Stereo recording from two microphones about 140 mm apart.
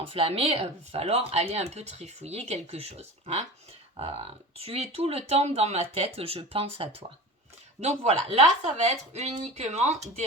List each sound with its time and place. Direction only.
0.0 s speech: 45° right (ahead or behind)